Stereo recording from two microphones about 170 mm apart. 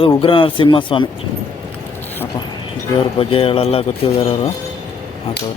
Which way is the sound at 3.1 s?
35° left (ahead or behind).